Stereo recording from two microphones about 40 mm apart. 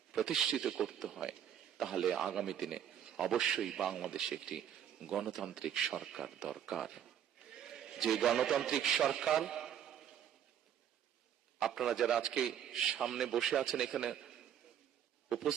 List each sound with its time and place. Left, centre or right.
0.1 s a man's voice: centre
5.1 s a man's voice: centre
7.5 s a sound: centre
8.6 s a man's voice: centre
11.6 s a man's voice: centre